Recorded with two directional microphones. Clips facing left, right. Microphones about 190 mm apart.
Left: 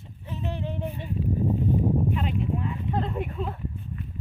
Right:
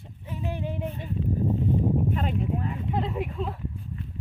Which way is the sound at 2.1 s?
40° right (ahead or behind).